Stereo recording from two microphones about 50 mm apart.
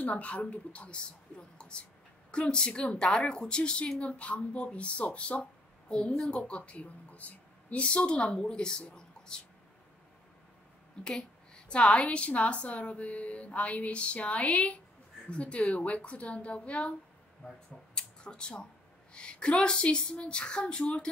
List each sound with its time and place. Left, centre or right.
0.0 s a woman's voice: left
11.7 s a woman's voice: left
17.9 s a sound: centre
19.1 s a woman's voice: centre